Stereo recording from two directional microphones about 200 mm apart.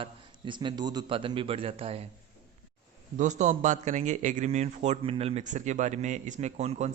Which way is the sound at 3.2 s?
35° right (ahead or behind).